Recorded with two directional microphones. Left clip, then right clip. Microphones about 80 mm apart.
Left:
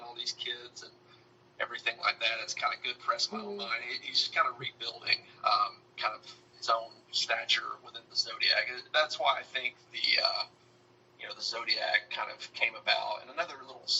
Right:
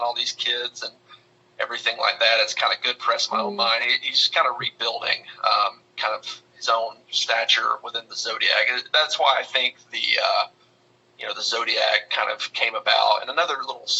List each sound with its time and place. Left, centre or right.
0.2 s a man's voice: right